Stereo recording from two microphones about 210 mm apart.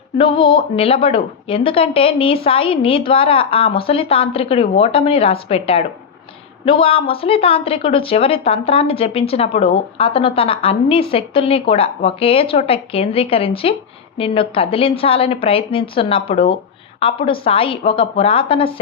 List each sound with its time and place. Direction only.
0.2 s speech: 25° left (ahead or behind)